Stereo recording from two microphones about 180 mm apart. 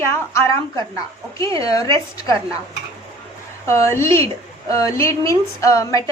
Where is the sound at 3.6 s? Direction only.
15° left (ahead or behind).